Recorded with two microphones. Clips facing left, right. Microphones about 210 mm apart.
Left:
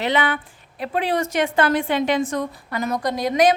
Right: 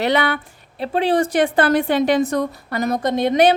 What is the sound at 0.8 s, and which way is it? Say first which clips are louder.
A woman's voice: right 5 dB; 30° right (ahead or behind).